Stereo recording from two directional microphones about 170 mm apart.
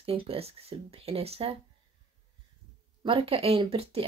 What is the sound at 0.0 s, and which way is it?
Speech, 35° right (ahead or behind).